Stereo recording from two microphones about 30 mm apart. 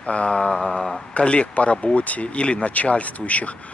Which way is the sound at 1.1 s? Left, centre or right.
Left.